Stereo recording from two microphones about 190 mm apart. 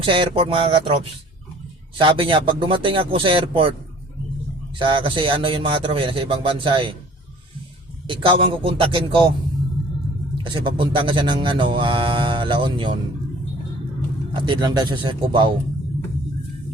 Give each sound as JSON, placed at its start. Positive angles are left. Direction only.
{"t": 0.0, "sound": "speech", "side_deg": -25}
{"t": 2.0, "sound": "speech", "side_deg": -30}
{"t": 4.8, "sound": "speech", "side_deg": -25}
{"t": 8.0, "sound": "speech", "side_deg": -25}
{"t": 10.3, "sound": "speech", "side_deg": -25}
{"t": 14.4, "sound": "speech", "side_deg": -20}